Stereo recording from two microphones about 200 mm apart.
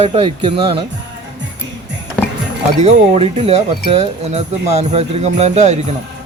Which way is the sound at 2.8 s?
30° right (ahead or behind).